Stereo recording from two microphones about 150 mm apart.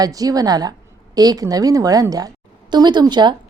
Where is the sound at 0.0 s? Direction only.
25° right (ahead or behind).